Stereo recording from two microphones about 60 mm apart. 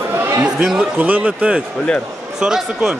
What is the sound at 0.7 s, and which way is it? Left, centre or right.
Speech, right.